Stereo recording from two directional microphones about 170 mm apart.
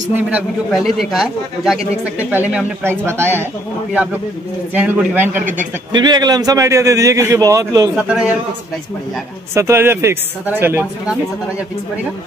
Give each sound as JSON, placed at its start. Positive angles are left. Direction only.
{"t": 0.1, "sound": "speech", "side_deg": -10}
{"t": 4.7, "sound": "speech", "side_deg": -10}
{"t": 5.9, "sound": "a man's voice", "side_deg": -25}
{"t": 7.9, "sound": "speech", "side_deg": -5}
{"t": 9.5, "sound": "speech", "side_deg": -15}